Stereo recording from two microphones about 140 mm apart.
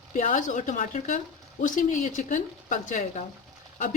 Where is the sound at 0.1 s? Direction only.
65° left (ahead or behind).